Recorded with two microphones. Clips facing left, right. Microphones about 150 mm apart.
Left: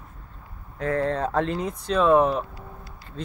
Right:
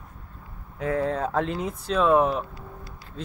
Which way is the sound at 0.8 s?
5° right (ahead or behind).